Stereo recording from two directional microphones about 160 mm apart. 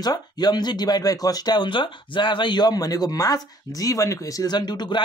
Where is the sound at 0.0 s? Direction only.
25° left (ahead or behind).